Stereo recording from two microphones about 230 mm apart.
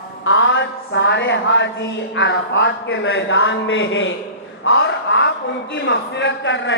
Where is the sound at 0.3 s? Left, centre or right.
Left.